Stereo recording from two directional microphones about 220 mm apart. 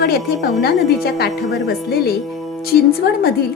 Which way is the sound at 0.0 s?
45° left (ahead or behind).